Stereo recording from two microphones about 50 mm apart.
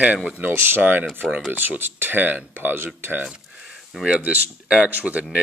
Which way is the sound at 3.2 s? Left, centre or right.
Centre.